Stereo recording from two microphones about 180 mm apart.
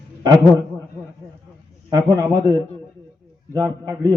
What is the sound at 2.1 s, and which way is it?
Speech, 20° right (ahead or behind).